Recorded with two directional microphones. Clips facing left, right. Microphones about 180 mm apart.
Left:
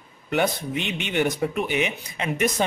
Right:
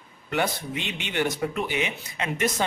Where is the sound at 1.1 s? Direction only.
15° left (ahead or behind).